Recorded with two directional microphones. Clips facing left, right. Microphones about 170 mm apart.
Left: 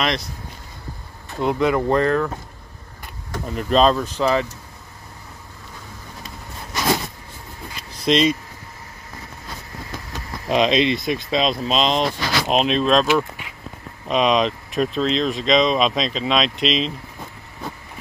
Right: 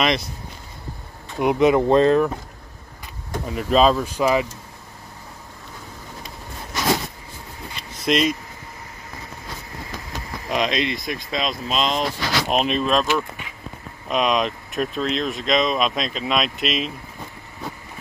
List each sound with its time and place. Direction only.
0.0 s speech: 5° right (ahead or behind)
1.4 s speech: 20° right (ahead or behind)
3.4 s speech: 5° right (ahead or behind)
8.1 s speech: 5° right (ahead or behind)
10.5 s speech: 25° left (ahead or behind)
12.5 s speech: 5° right (ahead or behind)
14.0 s speech: centre (ahead or behind)